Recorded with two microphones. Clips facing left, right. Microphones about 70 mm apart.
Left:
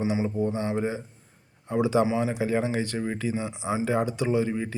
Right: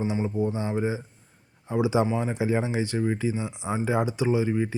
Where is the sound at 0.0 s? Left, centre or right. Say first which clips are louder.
Left 1 dB; centre.